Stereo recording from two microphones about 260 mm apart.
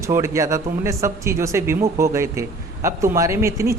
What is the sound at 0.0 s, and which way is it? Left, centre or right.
A woman's voice, centre.